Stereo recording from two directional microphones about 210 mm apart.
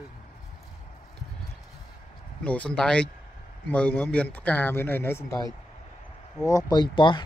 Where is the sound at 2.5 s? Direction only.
5° left (ahead or behind).